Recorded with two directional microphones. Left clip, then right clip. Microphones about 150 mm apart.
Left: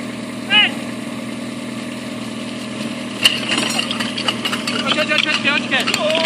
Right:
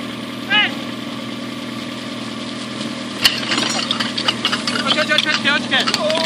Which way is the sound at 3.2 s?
15° left (ahead or behind).